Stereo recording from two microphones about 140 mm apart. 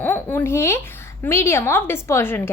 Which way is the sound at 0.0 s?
15° left (ahead or behind).